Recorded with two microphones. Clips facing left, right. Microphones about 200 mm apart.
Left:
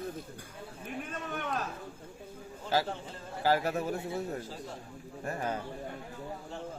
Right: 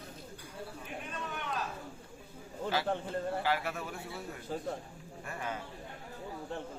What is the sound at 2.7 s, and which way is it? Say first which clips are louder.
A man's voice: left 2 dB; 40° left (ahead or behind).